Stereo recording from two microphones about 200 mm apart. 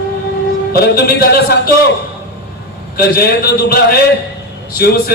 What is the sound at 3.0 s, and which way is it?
Speech, 50° left (ahead or behind).